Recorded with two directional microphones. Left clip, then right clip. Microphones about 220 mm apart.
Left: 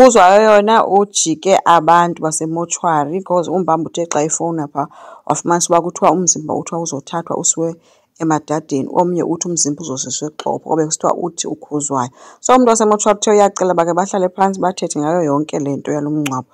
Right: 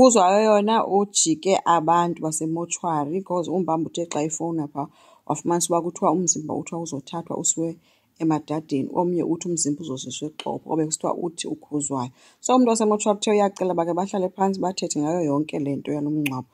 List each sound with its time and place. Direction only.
0.0 s speech: 20° left (ahead or behind)